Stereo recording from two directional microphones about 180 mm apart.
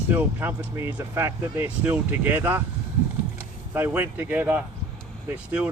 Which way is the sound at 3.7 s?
10° right (ahead or behind).